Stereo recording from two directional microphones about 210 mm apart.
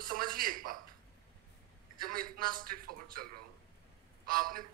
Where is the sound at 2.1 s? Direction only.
45° right (ahead or behind).